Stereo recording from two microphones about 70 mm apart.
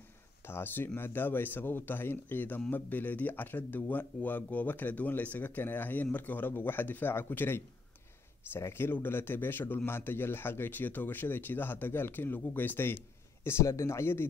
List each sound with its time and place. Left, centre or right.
0.5 s speech: left